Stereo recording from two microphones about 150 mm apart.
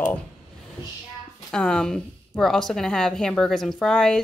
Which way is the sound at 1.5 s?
5° left (ahead or behind).